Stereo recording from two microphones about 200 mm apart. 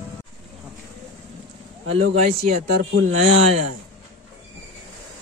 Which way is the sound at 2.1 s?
35° right (ahead or behind).